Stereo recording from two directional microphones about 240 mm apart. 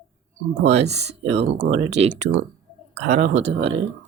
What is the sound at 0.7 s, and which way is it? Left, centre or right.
Speech, right.